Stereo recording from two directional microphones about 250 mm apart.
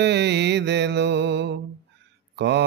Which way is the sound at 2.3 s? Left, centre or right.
Right.